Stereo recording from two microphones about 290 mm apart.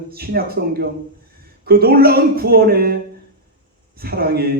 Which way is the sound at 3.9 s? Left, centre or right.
Right.